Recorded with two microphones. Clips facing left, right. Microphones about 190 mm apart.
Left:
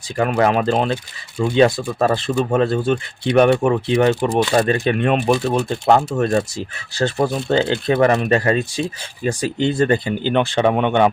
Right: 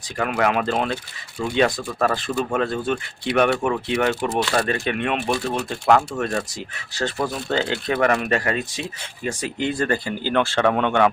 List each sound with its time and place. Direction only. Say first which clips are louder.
0.2 s speech: left 5 dB; 30° left (ahead or behind)
4.1 s speech: left 5 dB; 15° left (ahead or behind)
4.5 s speech: left 6 dB; 30° left (ahead or behind)
5.5 s speech: left 3 dB; 30° left (ahead or behind)